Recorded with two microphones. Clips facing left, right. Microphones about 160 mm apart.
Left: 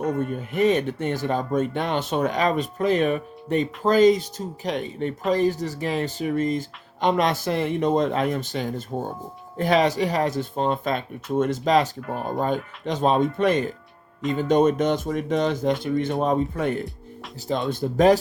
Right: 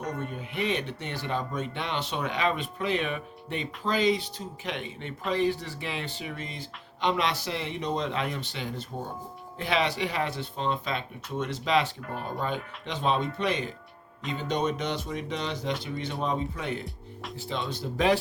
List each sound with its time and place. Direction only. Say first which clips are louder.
0.2 s speech: left 10 dB; 45° left (ahead or behind)